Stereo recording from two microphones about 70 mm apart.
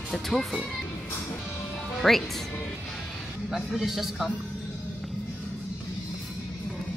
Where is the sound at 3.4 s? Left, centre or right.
Centre.